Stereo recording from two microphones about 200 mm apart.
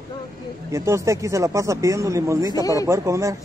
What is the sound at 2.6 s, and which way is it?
Speech, 15° left (ahead or behind).